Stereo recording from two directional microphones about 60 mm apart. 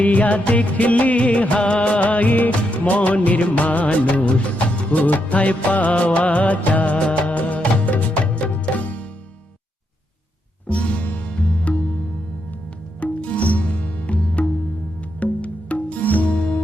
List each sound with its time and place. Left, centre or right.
0.0 s music of bollywood: left
7.0 s music: left
10.7 s music: left
13.0 s music: left